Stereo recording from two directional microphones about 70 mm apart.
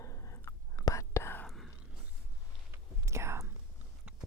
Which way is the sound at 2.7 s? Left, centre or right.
Right.